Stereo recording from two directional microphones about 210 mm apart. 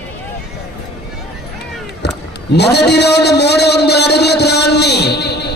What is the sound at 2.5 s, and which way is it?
A man's voice, 50° left (ahead or behind).